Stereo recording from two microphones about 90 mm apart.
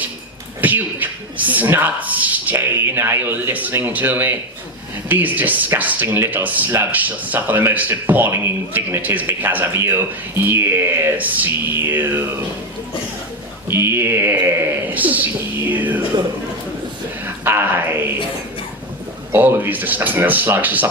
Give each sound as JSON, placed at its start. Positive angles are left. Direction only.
{"t": 0.6, "sound": "speech", "side_deg": -20}
{"t": 13.7, "sound": "speech", "side_deg": -30}
{"t": 17.2, "sound": "speech", "side_deg": -25}
{"t": 19.3, "sound": "speech", "side_deg": -20}